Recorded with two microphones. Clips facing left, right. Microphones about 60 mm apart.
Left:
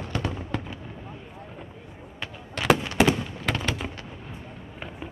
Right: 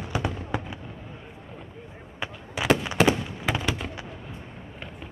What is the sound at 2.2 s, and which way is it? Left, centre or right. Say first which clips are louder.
Fireworks: right 2 dB; centre.